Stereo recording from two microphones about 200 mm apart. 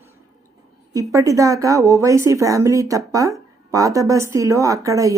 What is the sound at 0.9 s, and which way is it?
Speech, 15° right (ahead or behind).